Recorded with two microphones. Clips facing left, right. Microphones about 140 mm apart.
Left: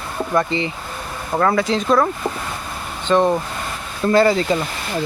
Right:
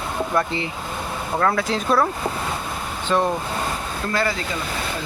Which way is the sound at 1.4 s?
Centre (ahead or behind).